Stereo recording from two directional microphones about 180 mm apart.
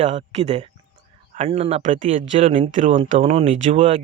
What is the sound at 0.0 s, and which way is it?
Speech, 40° right (ahead or behind).